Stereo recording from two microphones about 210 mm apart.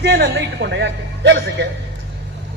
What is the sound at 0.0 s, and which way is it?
A man's voice, 55° right (ahead or behind).